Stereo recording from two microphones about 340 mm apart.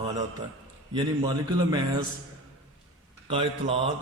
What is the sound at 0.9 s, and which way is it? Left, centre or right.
Speech, centre.